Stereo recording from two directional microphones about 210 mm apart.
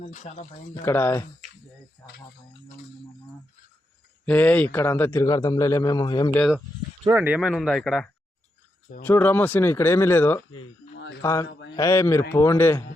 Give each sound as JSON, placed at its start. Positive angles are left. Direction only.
{"t": 0.0, "sound": "speech", "side_deg": 35}
{"t": 0.8, "sound": "a man's voice", "side_deg": 10}
{"t": 4.3, "sound": "a man's voice", "side_deg": 5}
{"t": 7.1, "sound": "a man's voice", "side_deg": -10}
{"t": 10.5, "sound": "a sound", "side_deg": 65}
{"t": 11.2, "sound": "a man's voice", "side_deg": 15}